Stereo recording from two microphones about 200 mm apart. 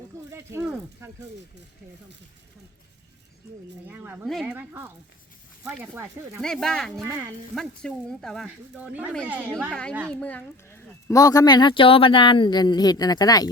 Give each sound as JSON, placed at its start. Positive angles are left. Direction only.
{"t": 0.3, "sound": "speech", "side_deg": -10}
{"t": 3.8, "sound": "speech", "side_deg": -10}
{"t": 5.9, "sound": "speech", "side_deg": -10}
{"t": 6.4, "sound": "speech", "side_deg": 5}
{"t": 8.4, "sound": "speech", "side_deg": -5}
{"t": 9.5, "sound": "speech", "side_deg": 5}